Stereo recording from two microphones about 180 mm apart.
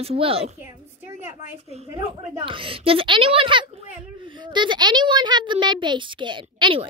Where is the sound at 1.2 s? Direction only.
45° left (ahead or behind).